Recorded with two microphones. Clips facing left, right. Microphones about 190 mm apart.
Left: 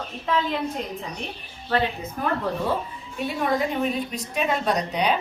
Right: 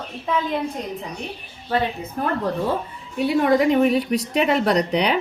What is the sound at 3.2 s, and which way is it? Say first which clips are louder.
A woman's voice: right 7 dB; 75° right (ahead or behind).